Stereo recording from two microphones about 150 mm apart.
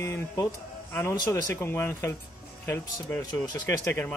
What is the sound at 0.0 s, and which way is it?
Speech, 20° left (ahead or behind).